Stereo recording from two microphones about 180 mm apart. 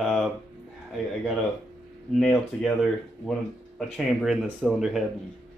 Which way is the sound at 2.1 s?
Centre (ahead or behind).